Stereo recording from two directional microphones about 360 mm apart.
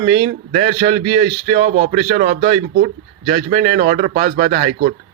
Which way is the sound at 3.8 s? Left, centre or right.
Right.